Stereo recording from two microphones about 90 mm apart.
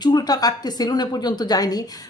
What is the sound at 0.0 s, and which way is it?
A woman's voice, 45° left (ahead or behind).